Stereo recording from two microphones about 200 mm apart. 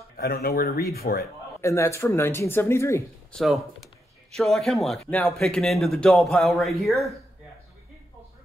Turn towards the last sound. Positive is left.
turn(degrees=0)  # may be behind; listen again after turning